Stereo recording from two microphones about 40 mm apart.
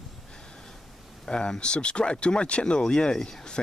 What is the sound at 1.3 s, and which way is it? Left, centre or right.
Speech, left.